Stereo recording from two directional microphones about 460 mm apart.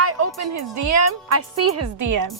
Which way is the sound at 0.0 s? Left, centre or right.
Right.